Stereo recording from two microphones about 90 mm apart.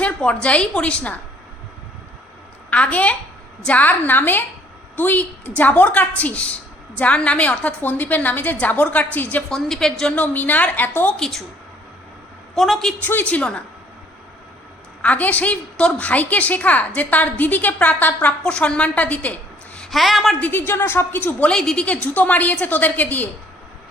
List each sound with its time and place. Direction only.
0.0 s a sound: 15° left (ahead or behind)
0.4 s a woman's voice: 10° left (ahead or behind)
2.6 s a woman's voice: 15° left (ahead or behind)
9.5 s a woman's voice: 5° left (ahead or behind)
10.2 s a woman's voice: 20° left (ahead or behind)
11.2 s a woman's voice: centre (ahead or behind)
12.5 s a woman's voice: centre (ahead or behind)
13.0 s a woman's voice: 20° left (ahead or behind)
15.0 s a woman's voice: 15° left (ahead or behind)
19.9 s a woman's voice: centre (ahead or behind)
20.4 s a woman's voice: 20° left (ahead or behind)
21.5 s a woman's voice: 5° left (ahead or behind)